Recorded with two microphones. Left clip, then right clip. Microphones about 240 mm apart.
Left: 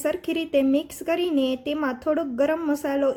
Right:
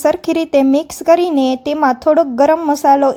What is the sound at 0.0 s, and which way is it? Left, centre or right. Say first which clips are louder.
Speech: right 11 dB; right.